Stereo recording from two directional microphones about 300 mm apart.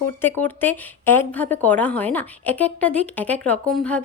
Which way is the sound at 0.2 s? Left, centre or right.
Centre.